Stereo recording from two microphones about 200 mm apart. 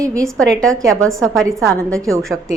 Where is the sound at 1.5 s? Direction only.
15° right (ahead or behind).